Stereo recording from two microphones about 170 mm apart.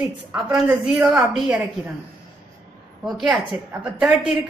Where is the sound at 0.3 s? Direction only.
5° right (ahead or behind).